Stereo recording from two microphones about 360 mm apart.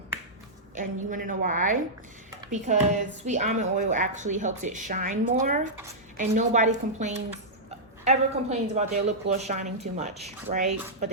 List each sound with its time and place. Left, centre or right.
1.1 s speech: right